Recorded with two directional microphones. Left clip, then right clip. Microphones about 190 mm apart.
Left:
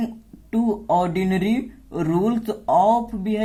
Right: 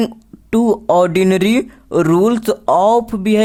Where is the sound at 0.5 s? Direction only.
45° right (ahead or behind).